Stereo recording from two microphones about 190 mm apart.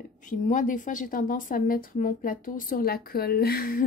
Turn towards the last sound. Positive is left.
turn(degrees=50)  # may be behind; listen again after turning